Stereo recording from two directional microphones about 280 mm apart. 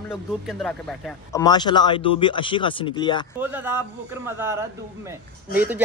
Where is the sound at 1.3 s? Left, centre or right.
Centre.